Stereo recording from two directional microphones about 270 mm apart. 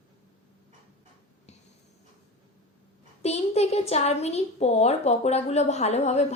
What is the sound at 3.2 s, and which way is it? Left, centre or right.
A woman's voice, left.